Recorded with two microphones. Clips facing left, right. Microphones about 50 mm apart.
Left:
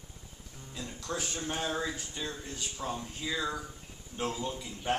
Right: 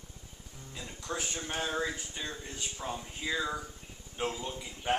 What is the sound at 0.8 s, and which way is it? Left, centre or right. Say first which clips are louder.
Speech: left 1 dB; centre.